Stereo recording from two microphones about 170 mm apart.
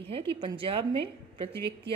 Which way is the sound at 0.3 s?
30° right (ahead or behind).